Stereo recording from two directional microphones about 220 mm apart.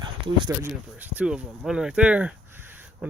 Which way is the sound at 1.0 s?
5° right (ahead or behind).